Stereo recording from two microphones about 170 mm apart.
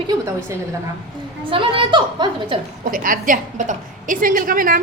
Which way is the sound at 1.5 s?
30° right (ahead or behind).